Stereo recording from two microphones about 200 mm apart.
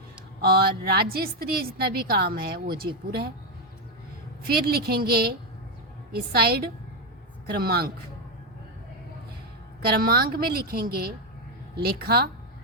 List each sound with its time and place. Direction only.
0.4 s a woman's voice: 50° right (ahead or behind)
4.4 s a woman's voice: 50° right (ahead or behind)
9.8 s a woman's voice: 50° right (ahead or behind)